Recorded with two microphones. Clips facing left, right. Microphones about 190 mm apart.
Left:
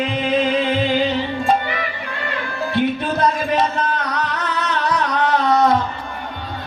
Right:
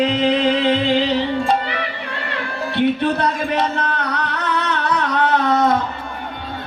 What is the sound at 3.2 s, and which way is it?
Music, 65° right (ahead or behind).